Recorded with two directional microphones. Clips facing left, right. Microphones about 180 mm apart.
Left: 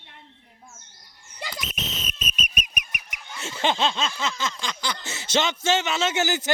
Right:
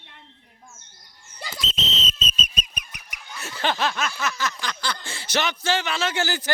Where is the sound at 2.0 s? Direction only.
15° left (ahead or behind).